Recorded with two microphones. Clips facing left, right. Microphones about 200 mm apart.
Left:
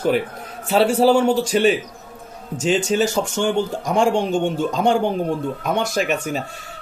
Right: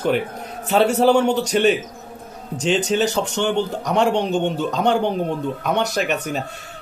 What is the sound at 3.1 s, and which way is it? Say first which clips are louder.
A man's voice: left 1 dB; 10° left (ahead or behind).